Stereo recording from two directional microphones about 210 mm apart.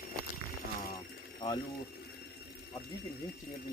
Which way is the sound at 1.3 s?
20° left (ahead or behind).